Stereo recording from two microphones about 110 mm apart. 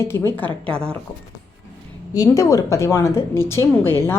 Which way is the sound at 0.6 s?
10° left (ahead or behind).